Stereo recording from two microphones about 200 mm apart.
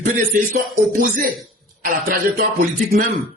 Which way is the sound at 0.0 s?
40° right (ahead or behind).